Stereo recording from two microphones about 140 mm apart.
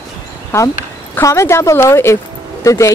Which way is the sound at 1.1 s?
20° left (ahead or behind).